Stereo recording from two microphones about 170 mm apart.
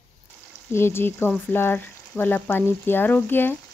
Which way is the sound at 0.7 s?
15° left (ahead or behind).